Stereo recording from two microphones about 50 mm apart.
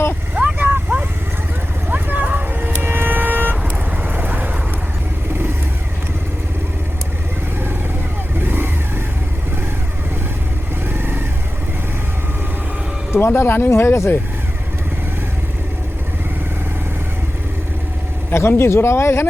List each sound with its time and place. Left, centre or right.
0.3 s vehicle: right
8.4 s vehicle: right
10.8 s vehicle: right
13.1 s speech: left
18.3 s speech: left